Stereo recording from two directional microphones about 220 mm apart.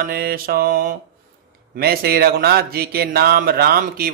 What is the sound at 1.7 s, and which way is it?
Speech, 45° right (ahead or behind).